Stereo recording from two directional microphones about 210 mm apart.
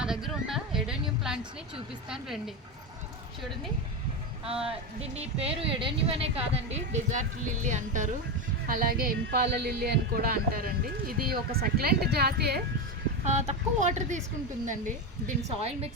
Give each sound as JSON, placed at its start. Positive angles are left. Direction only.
{"t": 0.0, "sound": "a sound", "side_deg": 0}
{"t": 2.0, "sound": "speech", "side_deg": -5}
{"t": 4.4, "sound": "speech", "side_deg": -30}
{"t": 13.2, "sound": "speech", "side_deg": -35}
{"t": 15.4, "sound": "speech", "side_deg": -30}